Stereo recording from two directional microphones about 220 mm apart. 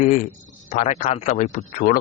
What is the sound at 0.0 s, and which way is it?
Speech, 35° left (ahead or behind).